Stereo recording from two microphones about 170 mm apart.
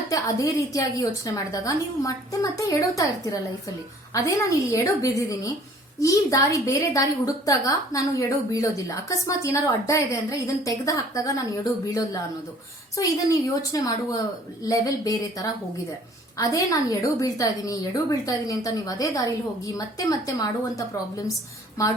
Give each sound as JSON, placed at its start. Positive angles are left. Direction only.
{"t": 0.1, "sound": "a woman's voice", "side_deg": 20}